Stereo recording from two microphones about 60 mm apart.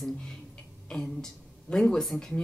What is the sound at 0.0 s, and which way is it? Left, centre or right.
A woman's voice, centre.